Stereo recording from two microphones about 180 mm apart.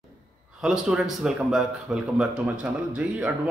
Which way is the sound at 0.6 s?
5° right (ahead or behind).